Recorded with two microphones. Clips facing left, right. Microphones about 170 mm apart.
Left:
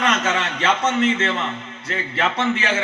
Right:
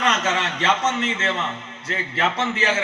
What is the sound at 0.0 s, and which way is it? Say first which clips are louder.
Speech: left 1 dB; 40° right (ahead or behind).